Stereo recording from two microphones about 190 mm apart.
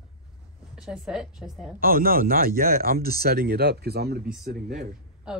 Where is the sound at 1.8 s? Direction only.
50° right (ahead or behind).